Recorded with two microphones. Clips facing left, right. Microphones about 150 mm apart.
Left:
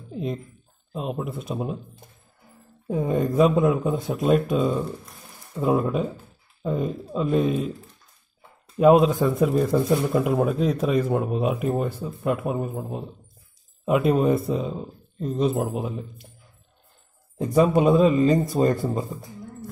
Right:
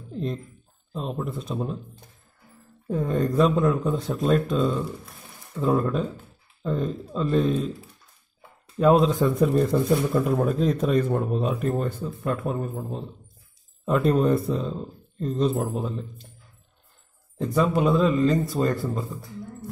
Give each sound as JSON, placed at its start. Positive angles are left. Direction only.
{"t": 0.1, "sound": "speech", "side_deg": 5}
{"t": 8.7, "sound": "speech", "side_deg": 10}
{"t": 17.4, "sound": "speech", "side_deg": 15}